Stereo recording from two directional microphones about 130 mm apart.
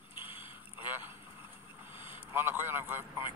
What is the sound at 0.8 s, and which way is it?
Boat, 15° right (ahead or behind).